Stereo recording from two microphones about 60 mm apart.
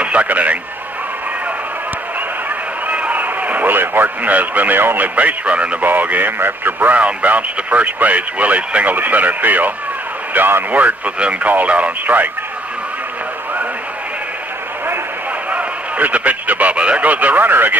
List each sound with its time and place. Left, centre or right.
0.0 s radio: right
2.9 s a man's voice: right
7.0 s speech: right
15.5 s a man's voice: right